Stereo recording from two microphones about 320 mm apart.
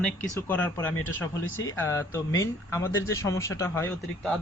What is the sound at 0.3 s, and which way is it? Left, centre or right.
Speech, centre.